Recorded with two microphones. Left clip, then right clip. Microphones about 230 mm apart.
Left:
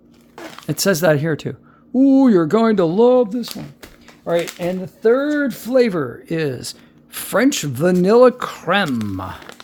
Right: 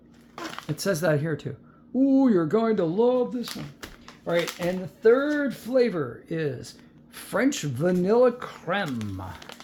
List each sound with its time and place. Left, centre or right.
0.7 s speech: left